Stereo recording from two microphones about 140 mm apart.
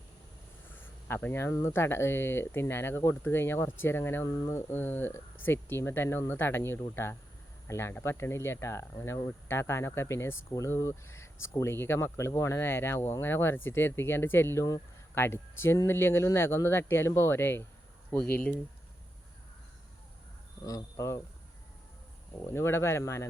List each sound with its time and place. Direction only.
0.8 s speech: 15° left (ahead or behind)
20.7 s speech: 25° left (ahead or behind)
22.5 s speech: 20° left (ahead or behind)